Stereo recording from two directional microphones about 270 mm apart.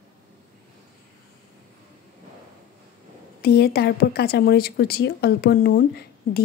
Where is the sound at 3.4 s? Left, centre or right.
Left.